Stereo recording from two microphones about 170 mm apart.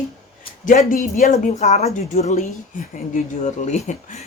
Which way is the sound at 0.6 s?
50° left (ahead or behind).